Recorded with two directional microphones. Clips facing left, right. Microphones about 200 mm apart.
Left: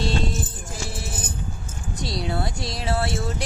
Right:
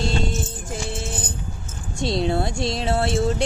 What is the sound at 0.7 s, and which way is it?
Music, 25° right (ahead or behind).